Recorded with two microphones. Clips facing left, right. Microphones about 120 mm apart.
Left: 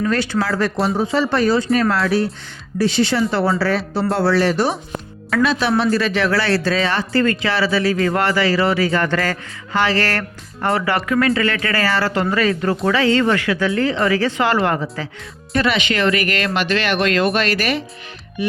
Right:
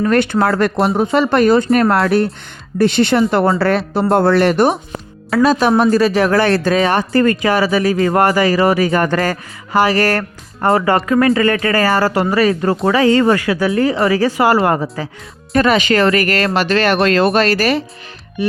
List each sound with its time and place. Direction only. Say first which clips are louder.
0.0 s speech: right 6 dB; 55° right (ahead or behind)
5.3 s speech: right 5 dB; 40° right (ahead or behind)
7.6 s speech: right 3 dB; 15° right (ahead or behind)
7.9 s speech: right 4 dB; 30° right (ahead or behind)
8.6 s speech: right 4 dB; 20° right (ahead or behind)
10.2 s speech: right 4 dB; 35° right (ahead or behind)
12.2 s speech: right 4 dB; 30° right (ahead or behind)
13.1 s speech: right 5 dB; 20° right (ahead or behind)
13.3 s speech: right 3 dB; 35° right (ahead or behind)
15.5 s speech: right 6 dB; 45° right (ahead or behind)